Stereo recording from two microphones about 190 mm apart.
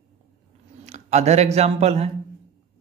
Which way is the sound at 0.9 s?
35° right (ahead or behind).